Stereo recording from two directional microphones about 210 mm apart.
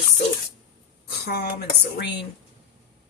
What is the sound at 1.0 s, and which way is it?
Speech, 45° left (ahead or behind).